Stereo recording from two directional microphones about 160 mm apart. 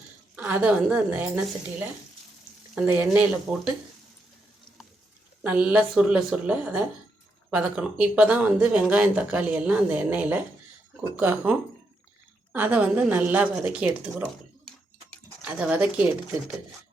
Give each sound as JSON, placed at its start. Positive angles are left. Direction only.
{"t": 0.3, "sound": "speech", "side_deg": -10}
{"t": 2.7, "sound": "speech", "side_deg": -10}
{"t": 5.4, "sound": "speech", "side_deg": -10}
{"t": 12.5, "sound": "speech", "side_deg": -10}
{"t": 15.4, "sound": "speech", "side_deg": -10}